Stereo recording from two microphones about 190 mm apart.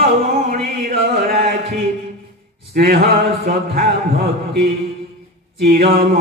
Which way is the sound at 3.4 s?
50° right (ahead or behind).